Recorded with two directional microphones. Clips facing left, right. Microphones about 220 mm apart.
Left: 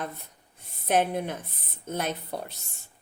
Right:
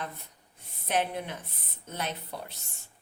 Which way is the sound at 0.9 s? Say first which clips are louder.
Left 5 dB; 50° left (ahead or behind).